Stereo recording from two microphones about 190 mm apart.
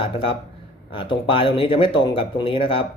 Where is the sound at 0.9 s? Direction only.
25° left (ahead or behind).